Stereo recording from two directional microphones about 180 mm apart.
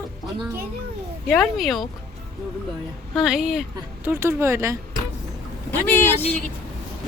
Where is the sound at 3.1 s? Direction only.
5° right (ahead or behind).